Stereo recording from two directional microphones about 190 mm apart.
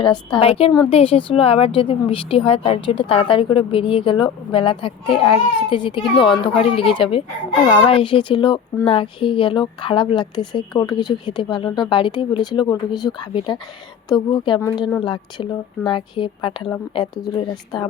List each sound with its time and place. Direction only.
0.0 s a woman's voice: 25° left (ahead or behind)
14.6 s speech: 10° left (ahead or behind)
15.0 s a woman's voice: 25° left (ahead or behind)